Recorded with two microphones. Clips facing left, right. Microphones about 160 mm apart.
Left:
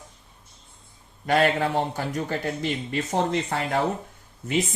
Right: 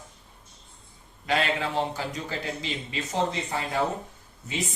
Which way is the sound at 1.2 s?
50° left (ahead or behind).